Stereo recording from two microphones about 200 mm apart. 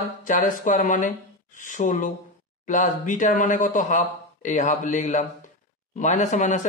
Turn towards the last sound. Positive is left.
turn(degrees=35)  # may be behind; listen again after turning